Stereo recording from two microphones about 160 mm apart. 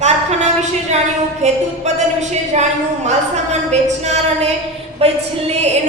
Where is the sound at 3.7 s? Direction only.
45° right (ahead or behind).